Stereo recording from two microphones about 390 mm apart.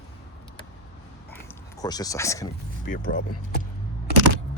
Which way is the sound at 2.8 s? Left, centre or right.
Centre.